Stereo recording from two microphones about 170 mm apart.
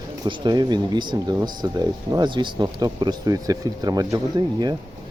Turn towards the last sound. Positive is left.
turn(degrees=-25)  # may be behind; listen again after turning